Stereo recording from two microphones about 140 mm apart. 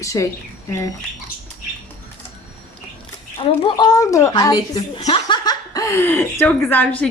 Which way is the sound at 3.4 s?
40° left (ahead or behind).